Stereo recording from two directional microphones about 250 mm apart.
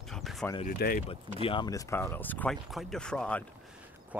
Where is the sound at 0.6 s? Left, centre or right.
Left.